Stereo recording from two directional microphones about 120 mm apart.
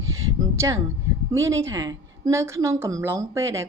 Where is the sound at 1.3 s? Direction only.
25° right (ahead or behind).